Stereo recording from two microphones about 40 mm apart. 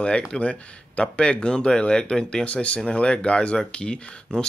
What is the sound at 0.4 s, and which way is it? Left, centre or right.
Speech, left.